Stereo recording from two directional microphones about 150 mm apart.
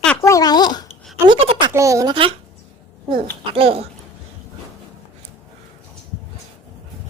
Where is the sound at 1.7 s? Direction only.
20° right (ahead or behind).